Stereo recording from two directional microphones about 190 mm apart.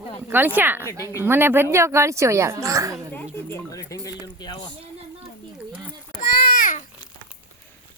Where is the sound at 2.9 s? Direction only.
10° left (ahead or behind).